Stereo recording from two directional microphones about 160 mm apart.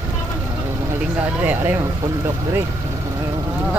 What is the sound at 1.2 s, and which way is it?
Speech, 10° right (ahead or behind).